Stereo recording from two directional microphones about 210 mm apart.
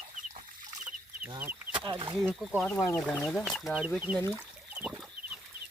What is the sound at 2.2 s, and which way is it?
Speech, centre (ahead or behind).